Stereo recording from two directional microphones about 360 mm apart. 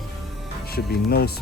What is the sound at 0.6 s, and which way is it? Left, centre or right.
Speech, left.